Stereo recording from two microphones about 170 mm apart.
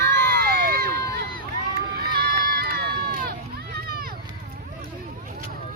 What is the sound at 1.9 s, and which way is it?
Run, 70° right (ahead or behind).